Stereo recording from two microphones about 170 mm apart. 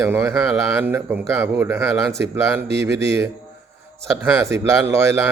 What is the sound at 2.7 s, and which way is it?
Speech, 90° right.